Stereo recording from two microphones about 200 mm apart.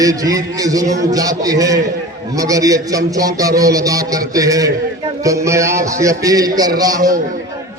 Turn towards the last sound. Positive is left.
turn(degrees=-20)  # may be behind; listen again after turning